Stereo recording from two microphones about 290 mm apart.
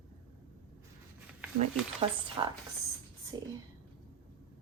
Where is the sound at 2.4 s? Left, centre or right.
Centre.